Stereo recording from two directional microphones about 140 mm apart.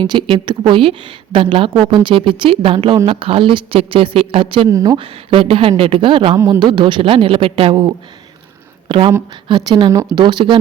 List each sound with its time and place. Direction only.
0.0 s a woman's voice: 35° right (ahead or behind)
4.7 s speech: 25° right (ahead or behind)
4.9 s a woman's voice: 40° right (ahead or behind)
6.3 s speech: 20° right (ahead or behind)
6.6 s a woman's voice: 35° right (ahead or behind)